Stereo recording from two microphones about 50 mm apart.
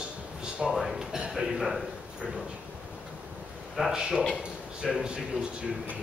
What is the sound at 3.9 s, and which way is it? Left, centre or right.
A man's voice, centre.